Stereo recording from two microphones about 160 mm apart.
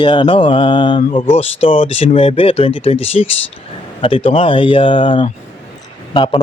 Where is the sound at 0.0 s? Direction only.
30° left (ahead or behind).